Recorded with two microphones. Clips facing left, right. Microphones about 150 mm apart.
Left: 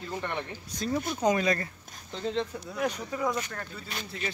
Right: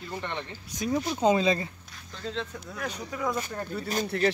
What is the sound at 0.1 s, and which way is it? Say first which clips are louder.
Speech: left 1 dB; 10° left (ahead or behind).